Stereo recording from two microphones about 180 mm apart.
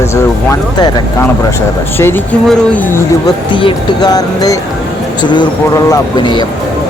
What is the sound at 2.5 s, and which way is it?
Speech, 10° left (ahead or behind).